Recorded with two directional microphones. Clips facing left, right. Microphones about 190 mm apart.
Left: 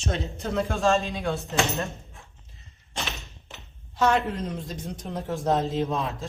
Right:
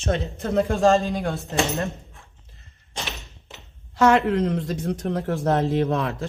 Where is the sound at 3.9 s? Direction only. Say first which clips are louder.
Right 6 dB; 90° right.